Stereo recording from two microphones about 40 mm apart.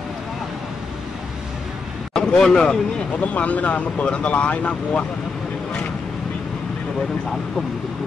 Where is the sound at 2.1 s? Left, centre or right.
Centre.